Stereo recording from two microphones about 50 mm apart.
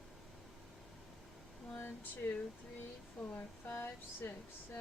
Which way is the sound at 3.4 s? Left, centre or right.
Left.